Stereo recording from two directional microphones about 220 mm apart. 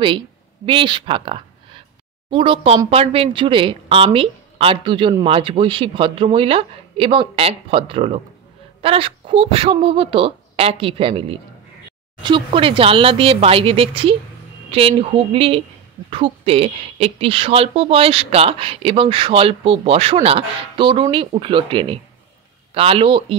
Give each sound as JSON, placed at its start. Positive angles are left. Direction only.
{"t": 0.7, "sound": "speech", "side_deg": -20}